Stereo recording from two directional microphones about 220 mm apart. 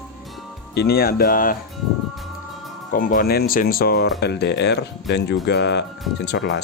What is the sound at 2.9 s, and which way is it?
Speech, 40° left (ahead or behind).